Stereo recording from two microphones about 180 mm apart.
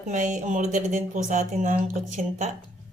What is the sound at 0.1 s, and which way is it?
Speech, 45° right (ahead or behind).